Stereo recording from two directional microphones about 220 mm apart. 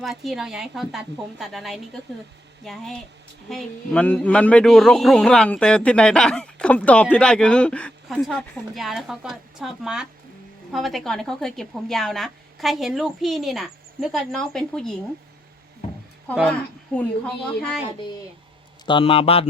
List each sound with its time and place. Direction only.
0.0 s speech: centre (ahead or behind)
16.5 s a woman's voice: 5° left (ahead or behind)
18.9 s speech: 25° left (ahead or behind)